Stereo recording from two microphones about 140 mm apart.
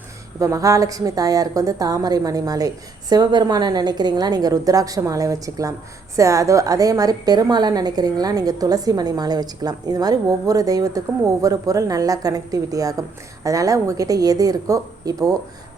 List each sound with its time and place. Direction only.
0.3 s a woman's voice: 25° right (ahead or behind)